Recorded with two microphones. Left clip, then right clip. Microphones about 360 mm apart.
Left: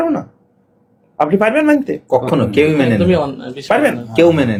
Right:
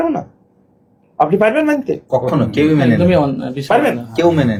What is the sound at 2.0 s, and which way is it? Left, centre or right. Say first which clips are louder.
Speech: left 2 dB; left.